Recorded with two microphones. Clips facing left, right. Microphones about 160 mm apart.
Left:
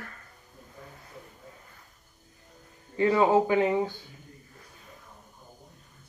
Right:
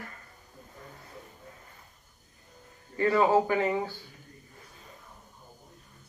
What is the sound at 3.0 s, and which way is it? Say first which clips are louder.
Speech: left 1 dB; 20° left (ahead or behind).